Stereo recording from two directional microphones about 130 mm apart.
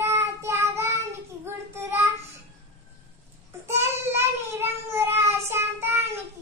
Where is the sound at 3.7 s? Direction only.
20° right (ahead or behind).